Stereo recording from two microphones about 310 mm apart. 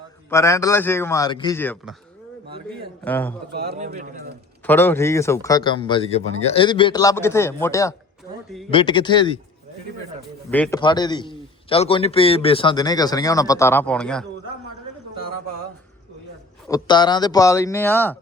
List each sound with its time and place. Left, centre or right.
0.3 s a man's voice: centre
3.0 s a man's voice: centre
3.5 s a man's voice: right
4.6 s a man's voice: centre
10.5 s a man's voice: centre
16.6 s a man's voice: centre